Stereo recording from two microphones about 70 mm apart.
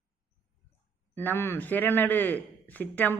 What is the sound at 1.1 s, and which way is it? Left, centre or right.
A man's voice, left.